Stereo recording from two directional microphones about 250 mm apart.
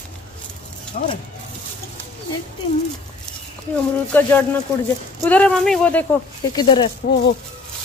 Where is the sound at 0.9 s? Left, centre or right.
Left.